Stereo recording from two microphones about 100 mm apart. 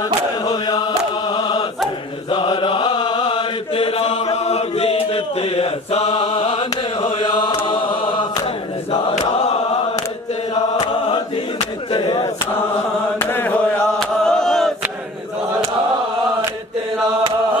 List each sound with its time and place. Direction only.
0.5 s chant: 40° left (ahead or behind)
2.3 s chant: 55° left (ahead or behind)
11.9 s a sound: 50° left (ahead or behind)
13.2 s chant: 20° left (ahead or behind)
13.9 s chant: 5° left (ahead or behind)